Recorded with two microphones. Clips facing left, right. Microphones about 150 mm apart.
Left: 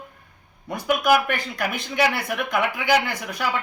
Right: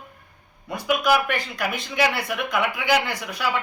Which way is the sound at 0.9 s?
50° left (ahead or behind).